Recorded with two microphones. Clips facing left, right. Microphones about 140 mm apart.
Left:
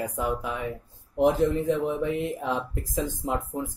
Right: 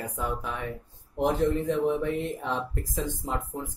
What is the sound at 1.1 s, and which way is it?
Speech, 5° left (ahead or behind).